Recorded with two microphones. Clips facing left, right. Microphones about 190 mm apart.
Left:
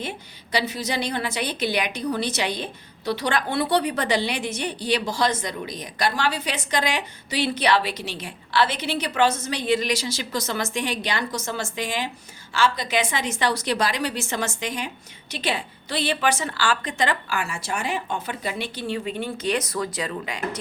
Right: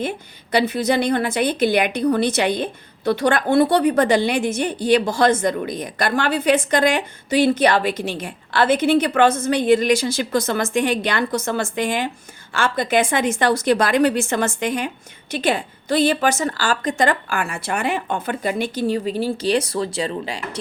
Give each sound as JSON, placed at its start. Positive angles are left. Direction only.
{"t": 0.0, "sound": "a woman's voice", "side_deg": -55}